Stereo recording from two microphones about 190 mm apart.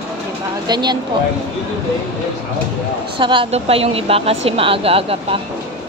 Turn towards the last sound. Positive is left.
turn(degrees=-30)  # may be behind; listen again after turning